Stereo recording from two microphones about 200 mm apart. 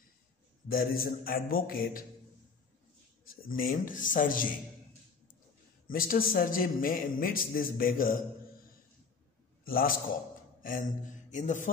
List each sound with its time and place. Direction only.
0.7 s a man's voice: 45° left (ahead or behind)
3.3 s a man's voice: 45° left (ahead or behind)
5.9 s a man's voice: 45° left (ahead or behind)
9.7 s a man's voice: 45° left (ahead or behind)